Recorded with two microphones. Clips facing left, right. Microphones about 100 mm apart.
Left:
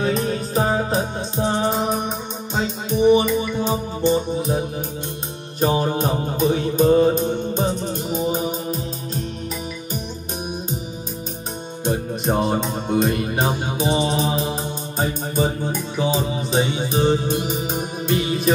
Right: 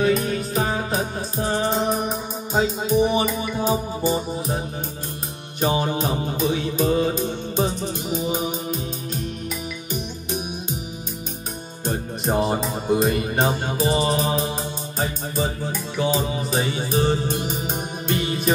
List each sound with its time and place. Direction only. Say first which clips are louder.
0.0 s music: right 1 dB; 35° left (ahead or behind)
1.7 s music: even; centre (ahead or behind)
5.6 s music: left 2 dB; 40° left (ahead or behind)
11.9 s music: left 2 dB; centre (ahead or behind)
16.7 s music: left 2 dB; centre (ahead or behind)